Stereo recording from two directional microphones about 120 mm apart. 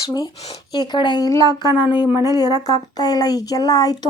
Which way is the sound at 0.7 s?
35° left (ahead or behind).